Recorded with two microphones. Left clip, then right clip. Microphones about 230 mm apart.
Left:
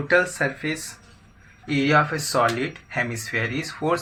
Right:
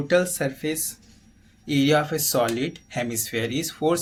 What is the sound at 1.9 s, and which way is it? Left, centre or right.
Speech, right.